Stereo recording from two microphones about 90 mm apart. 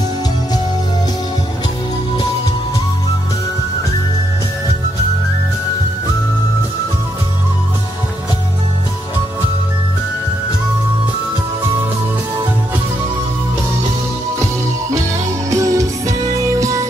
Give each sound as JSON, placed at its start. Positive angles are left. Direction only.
{"t": 14.4, "sound": "music", "side_deg": -35}